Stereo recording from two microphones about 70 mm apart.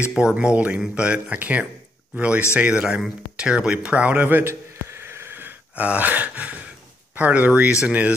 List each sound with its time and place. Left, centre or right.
0.1 s speech: centre
4.8 s a sound: right
5.9 s speech: right